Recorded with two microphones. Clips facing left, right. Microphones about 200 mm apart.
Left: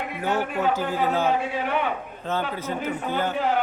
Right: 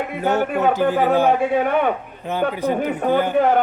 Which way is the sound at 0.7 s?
60° right (ahead or behind).